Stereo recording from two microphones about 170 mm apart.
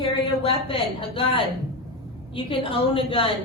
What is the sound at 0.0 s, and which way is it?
A woman's voice, 30° left (ahead or behind).